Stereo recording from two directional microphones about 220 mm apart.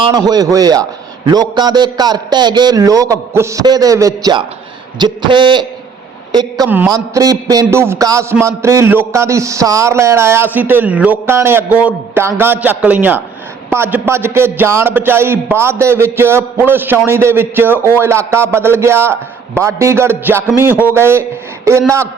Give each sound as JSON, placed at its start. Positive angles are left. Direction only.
{"t": 0.0, "sound": "a man's voice", "side_deg": -20}
{"t": 6.7, "sound": "a man's voice", "side_deg": -10}